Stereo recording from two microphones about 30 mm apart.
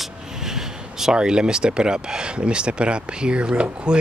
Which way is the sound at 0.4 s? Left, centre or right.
Centre.